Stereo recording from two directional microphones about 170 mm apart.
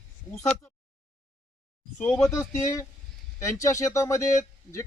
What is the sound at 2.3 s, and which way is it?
A man's voice, 20° left (ahead or behind).